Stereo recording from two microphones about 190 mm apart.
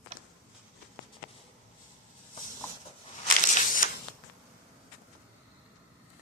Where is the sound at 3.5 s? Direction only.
45° left (ahead or behind).